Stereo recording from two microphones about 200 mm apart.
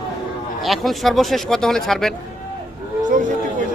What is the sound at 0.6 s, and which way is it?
Speech, centre (ahead or behind).